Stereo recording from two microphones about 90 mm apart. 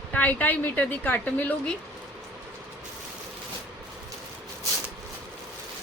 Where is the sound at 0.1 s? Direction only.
15° left (ahead or behind).